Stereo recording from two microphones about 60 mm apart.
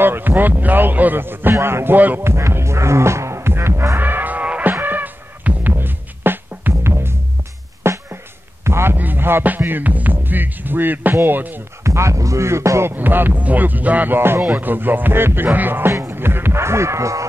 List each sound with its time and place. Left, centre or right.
0.0 s a man's voice: right
2.0 s music: right
2.2 s music: right
4.0 s music: right
6.7 s music: right
8.6 s a sound: right
8.9 s music: right
9.6 s a man's voice: right
11.8 s music: right
12.9 s a man's voice: right
15.9 s music: right
16.2 s a sound: right